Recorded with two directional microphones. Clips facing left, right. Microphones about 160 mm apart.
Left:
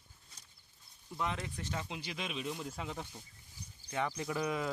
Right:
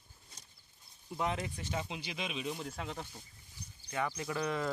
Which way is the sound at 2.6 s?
5° left (ahead or behind).